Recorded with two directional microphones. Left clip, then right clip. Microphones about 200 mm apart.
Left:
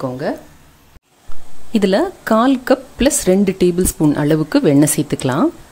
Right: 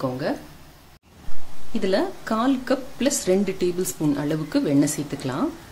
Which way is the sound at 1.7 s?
45° left (ahead or behind).